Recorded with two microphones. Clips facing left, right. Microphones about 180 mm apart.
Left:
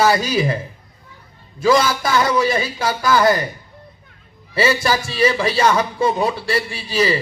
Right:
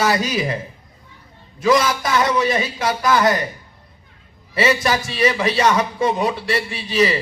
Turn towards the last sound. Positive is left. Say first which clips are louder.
# right 1 dB
turn(degrees=30)  # may be behind; listen again after turning